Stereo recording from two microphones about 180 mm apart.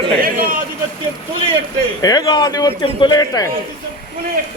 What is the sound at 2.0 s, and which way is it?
Speech, 20° left (ahead or behind).